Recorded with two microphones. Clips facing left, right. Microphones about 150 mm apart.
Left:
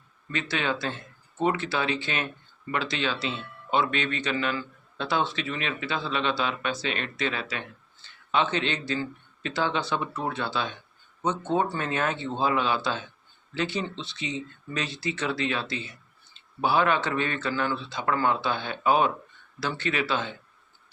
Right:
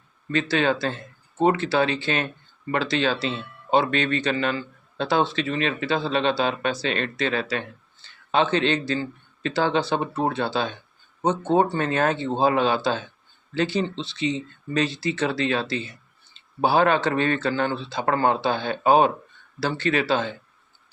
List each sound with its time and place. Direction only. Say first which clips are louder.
0.3 s a man's voice: right 7 dB; 35° right (ahead or behind)